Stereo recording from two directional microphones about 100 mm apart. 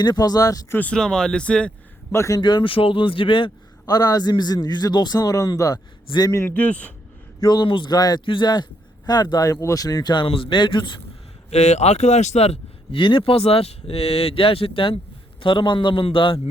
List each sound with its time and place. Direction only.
0.0 s a man's voice: 40° left (ahead or behind)
0.7 s speech: 15° left (ahead or behind)
2.1 s a man's voice: 30° left (ahead or behind)
2.4 s a man's voice: 50° left (ahead or behind)
3.9 s a man's voice: 40° left (ahead or behind)
6.3 s speech: 20° left (ahead or behind)
7.4 s speech: 50° left (ahead or behind)
8.2 s a man's voice: 55° left (ahead or behind)
10.2 s a man's voice: 65° left (ahead or behind)
11.5 s a man's voice: 90° left
13.0 s a man's voice: 60° left (ahead or behind)